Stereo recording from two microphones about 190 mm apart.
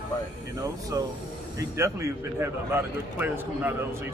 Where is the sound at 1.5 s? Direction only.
15° right (ahead or behind).